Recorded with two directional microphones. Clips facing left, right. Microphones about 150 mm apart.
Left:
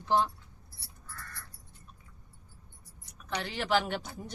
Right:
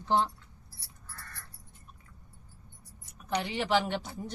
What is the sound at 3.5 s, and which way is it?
Speech, centre (ahead or behind).